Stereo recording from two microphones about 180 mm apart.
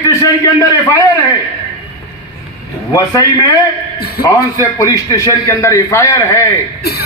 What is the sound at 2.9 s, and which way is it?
Speech, 15° left (ahead or behind).